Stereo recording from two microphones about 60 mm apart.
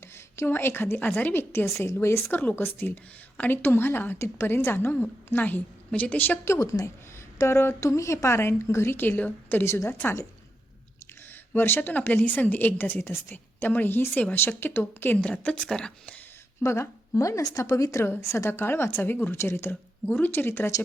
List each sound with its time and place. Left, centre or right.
0.3 s a woman's voice: left
2.3 s a woman's voice: left
6.4 s a woman's voice: left
7.3 s a woman's voice: left
7.9 s a woman's voice: left
11.5 s a woman's voice: left
11.8 s a woman's voice: left
15.2 s a woman's voice: centre
16.6 s a woman's voice: left
18.0 s a woman's voice: left
18.6 s a woman's voice: left
20.1 s a woman's voice: left